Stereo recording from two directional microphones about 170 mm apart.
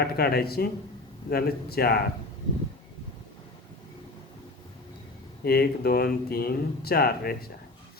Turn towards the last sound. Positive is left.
turn(degrees=65)  # may be behind; listen again after turning